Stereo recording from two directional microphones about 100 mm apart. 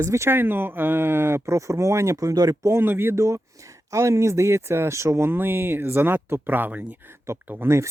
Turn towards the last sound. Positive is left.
turn(degrees=-25)  # may be behind; listen again after turning